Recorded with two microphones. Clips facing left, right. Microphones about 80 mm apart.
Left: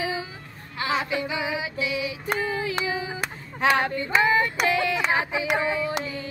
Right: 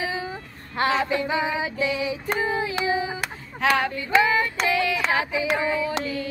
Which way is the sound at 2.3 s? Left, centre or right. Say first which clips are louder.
Right 1 dB; right.